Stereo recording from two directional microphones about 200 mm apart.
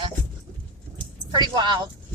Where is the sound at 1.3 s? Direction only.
20° right (ahead or behind).